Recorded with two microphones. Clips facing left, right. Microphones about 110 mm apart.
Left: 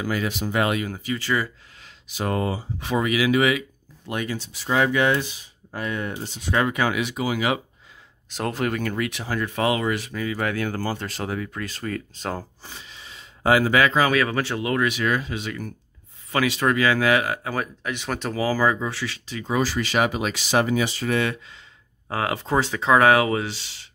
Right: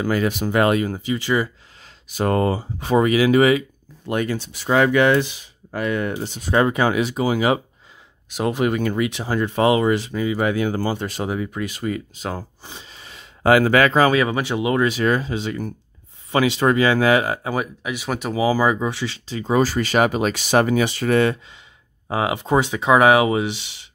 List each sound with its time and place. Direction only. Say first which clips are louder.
0.0 s speech: right 5 dB; 45° right (ahead or behind)
1.0 s speech: right 4 dB; 20° right (ahead or behind)
1.8 s speech: right 6 dB; 45° right (ahead or behind)
4.1 s speech: right 6 dB; 50° right (ahead or behind); by 6.4 s 80° right
6.4 s speech: right 4 dB; 30° right (ahead or behind)
8.3 s speech: right 5 dB; 10° right (ahead or behind)
12.6 s speech: right 2 dB; 25° right (ahead or behind)
12.9 s a sound: right 1 dB; 55° right (ahead or behind)
14.1 s speech: right 3 dB; 20° right (ahead or behind)
14.9 s speech: right 4 dB; 35° right (ahead or behind); by 21.2 s 60° right (ahead or behind)
22.0 s speech: right 4 dB; 15° right (ahead or behind)